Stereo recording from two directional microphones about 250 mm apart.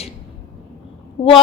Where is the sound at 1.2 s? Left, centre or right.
Left.